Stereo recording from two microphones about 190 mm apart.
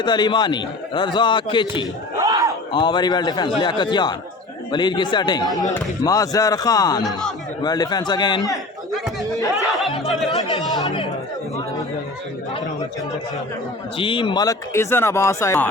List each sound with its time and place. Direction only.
0.0 s a man's voice: 25° left (ahead or behind)
2.1 s battle cry: 15° right (ahead or behind)
2.7 s a man's voice: 25° left (ahead or behind)
7.0 s a man's voice: centre (ahead or behind)
7.6 s a man's voice: 20° left (ahead or behind)
9.6 s a sound: centre (ahead or behind)
10.4 s a man's voice: 25° left (ahead or behind)
14.0 s speech: 25° left (ahead or behind)